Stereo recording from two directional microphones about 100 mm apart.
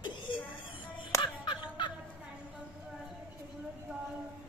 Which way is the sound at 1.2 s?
50° left (ahead or behind).